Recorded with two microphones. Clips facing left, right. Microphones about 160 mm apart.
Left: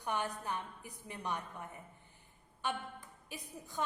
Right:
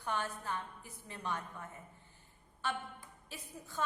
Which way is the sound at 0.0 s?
15° left (ahead or behind).